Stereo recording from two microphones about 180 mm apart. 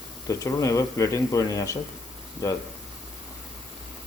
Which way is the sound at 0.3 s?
20° left (ahead or behind).